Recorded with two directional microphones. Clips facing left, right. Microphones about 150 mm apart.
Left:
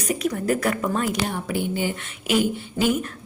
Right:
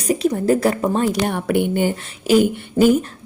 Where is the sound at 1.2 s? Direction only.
60° right (ahead or behind).